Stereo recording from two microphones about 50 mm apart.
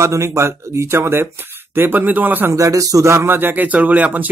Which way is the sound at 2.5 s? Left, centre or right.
Right.